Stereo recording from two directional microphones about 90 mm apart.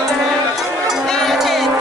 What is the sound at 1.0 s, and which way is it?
Music, 5° left (ahead or behind).